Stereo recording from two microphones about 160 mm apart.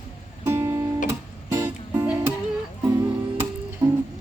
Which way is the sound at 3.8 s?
20° right (ahead or behind).